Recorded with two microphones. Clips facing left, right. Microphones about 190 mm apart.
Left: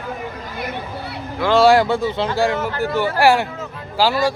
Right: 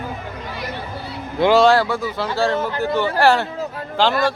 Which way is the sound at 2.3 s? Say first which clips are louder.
Left 1 dB; 10° left (ahead or behind).